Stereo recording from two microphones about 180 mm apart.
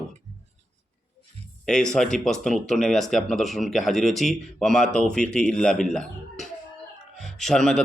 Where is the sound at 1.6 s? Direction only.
5° left (ahead or behind).